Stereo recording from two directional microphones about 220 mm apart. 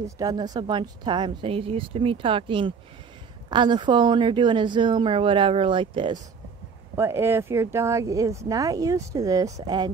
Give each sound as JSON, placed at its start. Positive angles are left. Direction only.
{"t": 0.0, "sound": "a woman's voice", "side_deg": -15}
{"t": 7.0, "sound": "speech", "side_deg": -10}